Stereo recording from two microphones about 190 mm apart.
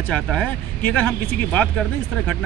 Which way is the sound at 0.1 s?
5° left (ahead or behind).